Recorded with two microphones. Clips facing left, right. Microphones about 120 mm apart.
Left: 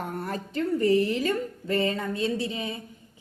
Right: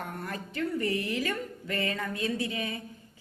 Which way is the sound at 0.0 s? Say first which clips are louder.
Left 5 dB; 30° left (ahead or behind).